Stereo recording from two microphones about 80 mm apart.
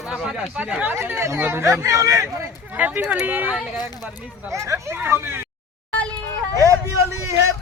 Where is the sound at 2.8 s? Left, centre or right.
Centre.